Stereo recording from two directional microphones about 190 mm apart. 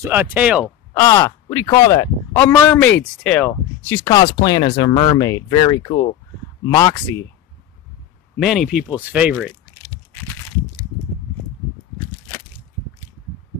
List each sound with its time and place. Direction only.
0.0 s speech: 10° right (ahead or behind)
0.9 s speech: 20° left (ahead or behind)
8.4 s speech: centre (ahead or behind)